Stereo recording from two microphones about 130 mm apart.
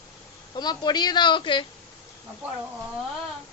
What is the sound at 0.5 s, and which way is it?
A woman's voice, 35° left (ahead or behind).